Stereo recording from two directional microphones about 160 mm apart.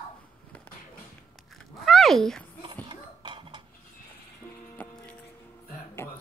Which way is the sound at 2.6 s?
30° right (ahead or behind).